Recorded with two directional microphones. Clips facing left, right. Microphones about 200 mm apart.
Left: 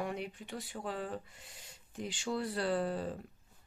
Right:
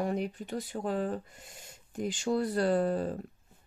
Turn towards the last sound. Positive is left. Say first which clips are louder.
# right 6 dB
turn(degrees=-45)  # may be behind; listen again after turning